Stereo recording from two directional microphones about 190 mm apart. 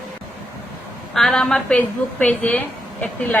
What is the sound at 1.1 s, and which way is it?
A woman's voice, centre (ahead or behind).